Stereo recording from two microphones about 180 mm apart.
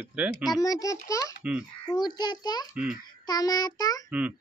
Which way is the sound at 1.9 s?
25° left (ahead or behind).